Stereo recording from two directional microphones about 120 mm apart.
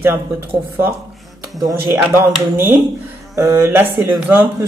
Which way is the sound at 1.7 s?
20° right (ahead or behind).